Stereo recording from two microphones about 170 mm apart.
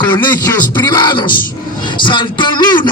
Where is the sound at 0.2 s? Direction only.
25° left (ahead or behind).